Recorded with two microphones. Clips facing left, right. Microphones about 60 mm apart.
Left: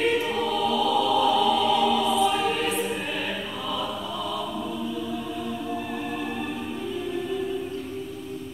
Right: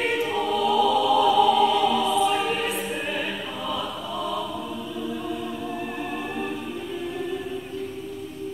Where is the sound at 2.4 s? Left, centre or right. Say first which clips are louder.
Left 1 dB; centre.